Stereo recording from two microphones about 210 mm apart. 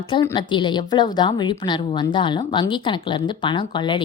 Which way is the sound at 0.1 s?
20° left (ahead or behind).